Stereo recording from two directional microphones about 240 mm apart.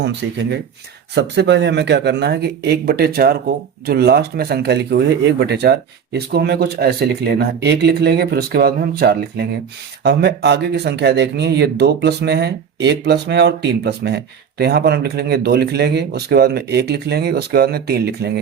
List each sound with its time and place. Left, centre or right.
0.0 s speech: right